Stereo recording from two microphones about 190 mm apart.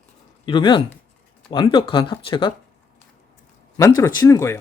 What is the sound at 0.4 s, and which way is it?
Speech, 25° left (ahead or behind).